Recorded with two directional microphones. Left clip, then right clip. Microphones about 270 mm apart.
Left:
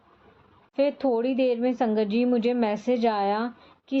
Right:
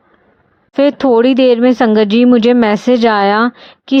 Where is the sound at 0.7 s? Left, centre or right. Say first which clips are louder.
Right 13 dB; right.